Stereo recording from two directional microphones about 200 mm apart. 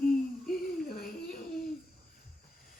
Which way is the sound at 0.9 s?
50° left (ahead or behind).